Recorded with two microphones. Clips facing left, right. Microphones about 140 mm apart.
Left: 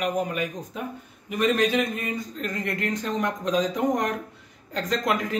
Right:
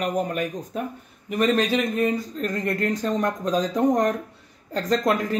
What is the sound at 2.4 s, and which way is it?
Speech, 40° right (ahead or behind).